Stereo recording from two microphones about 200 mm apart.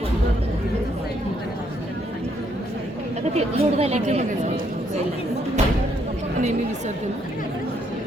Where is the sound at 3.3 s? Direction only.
30° right (ahead or behind).